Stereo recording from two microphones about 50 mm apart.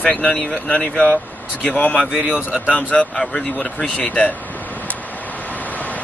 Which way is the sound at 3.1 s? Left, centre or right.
Centre.